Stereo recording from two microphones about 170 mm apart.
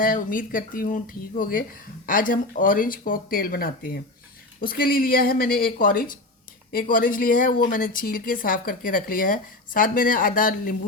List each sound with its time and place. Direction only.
0.0 s speech: 55° left (ahead or behind)